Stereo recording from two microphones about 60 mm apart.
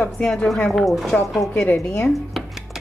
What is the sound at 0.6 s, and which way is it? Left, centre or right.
Speech, centre.